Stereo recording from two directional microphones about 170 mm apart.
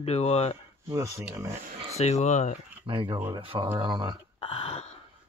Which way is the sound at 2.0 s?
40° left (ahead or behind).